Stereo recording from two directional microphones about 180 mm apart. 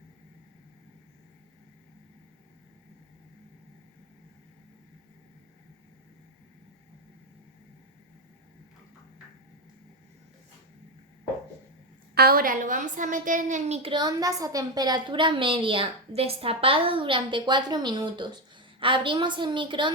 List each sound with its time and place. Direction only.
12.1 s a woman's voice: 60° right (ahead or behind); by 19.9 s 25° right (ahead or behind)